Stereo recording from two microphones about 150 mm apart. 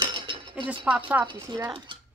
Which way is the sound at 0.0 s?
35° right (ahead or behind).